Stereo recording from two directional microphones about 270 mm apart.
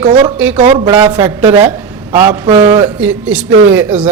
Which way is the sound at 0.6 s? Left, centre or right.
Centre.